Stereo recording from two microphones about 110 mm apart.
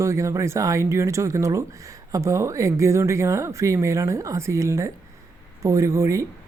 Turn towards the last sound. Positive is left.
turn(degrees=-30)  # may be behind; listen again after turning